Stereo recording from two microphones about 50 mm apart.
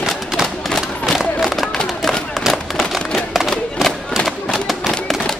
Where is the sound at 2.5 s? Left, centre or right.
Centre.